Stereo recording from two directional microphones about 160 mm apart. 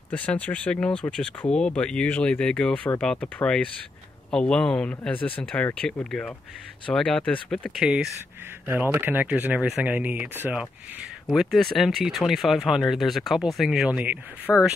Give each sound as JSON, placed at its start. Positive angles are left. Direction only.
{"t": 0.1, "sound": "speech", "side_deg": 10}
{"t": 8.6, "sound": "speech", "side_deg": -15}
{"t": 14.5, "sound": "speech", "side_deg": 10}